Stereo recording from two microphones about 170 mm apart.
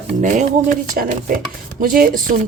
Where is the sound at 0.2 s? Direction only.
45° right (ahead or behind).